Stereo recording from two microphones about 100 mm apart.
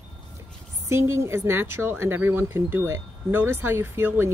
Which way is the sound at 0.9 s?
25° right (ahead or behind).